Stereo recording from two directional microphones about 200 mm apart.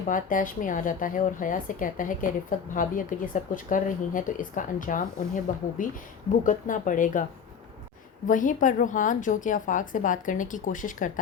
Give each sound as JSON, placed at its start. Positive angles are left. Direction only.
{"t": 0.1, "sound": "speech", "side_deg": 40}
{"t": 8.3, "sound": "speech", "side_deg": 40}